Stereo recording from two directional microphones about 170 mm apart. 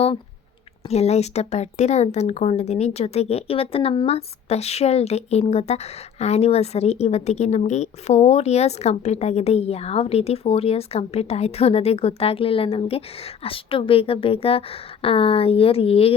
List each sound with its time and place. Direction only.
0.9 s speech: 40° left (ahead or behind)